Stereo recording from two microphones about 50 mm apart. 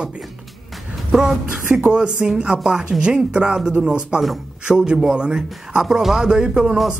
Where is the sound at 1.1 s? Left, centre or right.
Centre.